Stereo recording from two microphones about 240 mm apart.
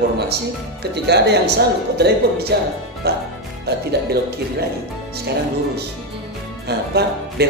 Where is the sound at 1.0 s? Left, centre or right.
Right.